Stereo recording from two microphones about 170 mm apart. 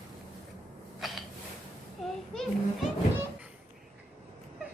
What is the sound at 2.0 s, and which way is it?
Children playing, centre (ahead or behind).